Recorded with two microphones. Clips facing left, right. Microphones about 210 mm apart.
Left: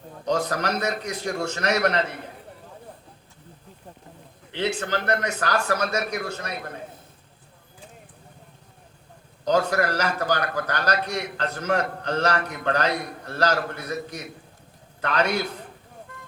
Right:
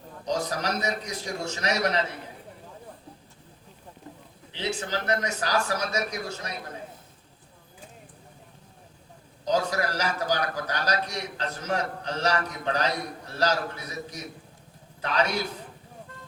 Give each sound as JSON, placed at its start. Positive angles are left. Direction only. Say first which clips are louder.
{"t": 0.3, "sound": "a man's voice", "louder": "left 4 dB", "side_deg": 60}
{"t": 4.5, "sound": "a man's voice", "louder": "left 4 dB", "side_deg": 60}
{"t": 9.4, "sound": "a man's voice", "louder": "left 4 dB", "side_deg": 60}